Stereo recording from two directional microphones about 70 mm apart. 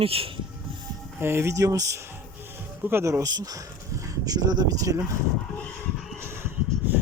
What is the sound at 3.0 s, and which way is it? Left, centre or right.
Speech, right.